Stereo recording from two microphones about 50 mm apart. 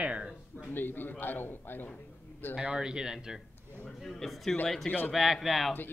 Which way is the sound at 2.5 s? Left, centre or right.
Centre.